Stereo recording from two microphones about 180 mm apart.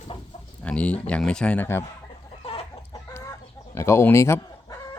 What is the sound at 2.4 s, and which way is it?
Chicken, 30° left (ahead or behind).